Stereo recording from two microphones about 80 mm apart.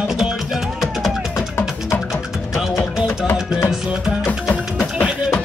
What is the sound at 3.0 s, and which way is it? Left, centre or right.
Music, left.